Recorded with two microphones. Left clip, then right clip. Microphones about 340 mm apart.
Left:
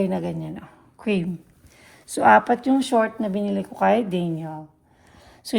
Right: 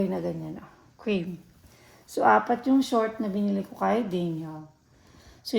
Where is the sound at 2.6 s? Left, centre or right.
Left.